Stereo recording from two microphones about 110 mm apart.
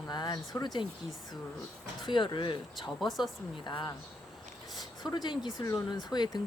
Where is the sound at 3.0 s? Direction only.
Centre (ahead or behind).